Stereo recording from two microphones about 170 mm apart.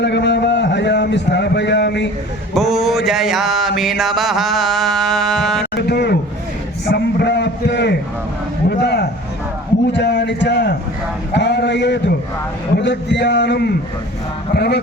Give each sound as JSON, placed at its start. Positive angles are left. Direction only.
{"t": 0.0, "sound": "a sound", "side_deg": 90}
{"t": 2.6, "sound": "speech", "side_deg": 0}
{"t": 3.1, "sound": "music", "side_deg": 0}
{"t": 5.7, "sound": "a man's voice", "side_deg": 75}
{"t": 8.8, "sound": "a sound", "side_deg": 80}
{"t": 9.9, "sound": "a man's voice", "side_deg": 90}